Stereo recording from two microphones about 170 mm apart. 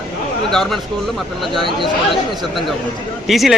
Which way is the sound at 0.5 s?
Centre (ahead or behind).